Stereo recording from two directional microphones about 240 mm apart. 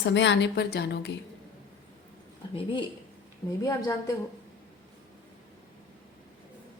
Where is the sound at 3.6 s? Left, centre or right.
Centre.